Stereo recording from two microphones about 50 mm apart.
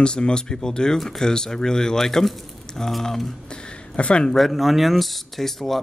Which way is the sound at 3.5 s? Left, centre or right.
Centre.